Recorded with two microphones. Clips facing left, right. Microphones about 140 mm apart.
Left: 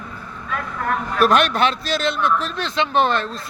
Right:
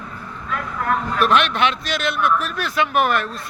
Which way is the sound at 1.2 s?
40° left (ahead or behind).